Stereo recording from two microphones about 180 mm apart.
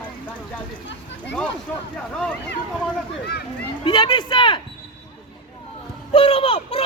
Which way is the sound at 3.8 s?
25° left (ahead or behind).